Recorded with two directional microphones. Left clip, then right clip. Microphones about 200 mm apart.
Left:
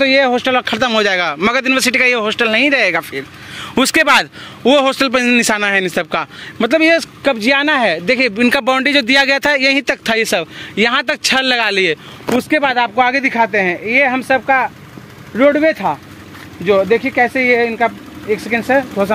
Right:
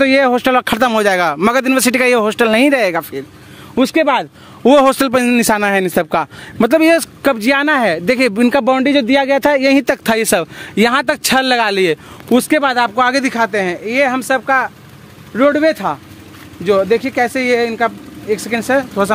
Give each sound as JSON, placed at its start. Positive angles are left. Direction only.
{"t": 0.0, "sound": "a man's voice", "side_deg": -55}
{"t": 3.0, "sound": "speech", "side_deg": -25}
{"t": 3.7, "sound": "speech", "side_deg": -5}
{"t": 4.6, "sound": "a man's voice", "side_deg": -40}
{"t": 8.6, "sound": "speech", "side_deg": -10}
{"t": 10.0, "sound": "a man's voice", "side_deg": -40}
{"t": 12.6, "sound": "speech", "side_deg": -10}